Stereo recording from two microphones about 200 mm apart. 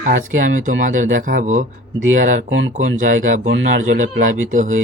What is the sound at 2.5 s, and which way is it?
Speech, 65° right (ahead or behind).